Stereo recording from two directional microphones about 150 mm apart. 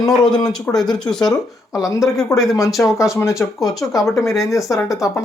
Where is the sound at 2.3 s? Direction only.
25° left (ahead or behind).